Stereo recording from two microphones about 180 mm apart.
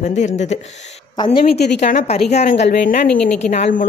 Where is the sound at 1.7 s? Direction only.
40° left (ahead or behind).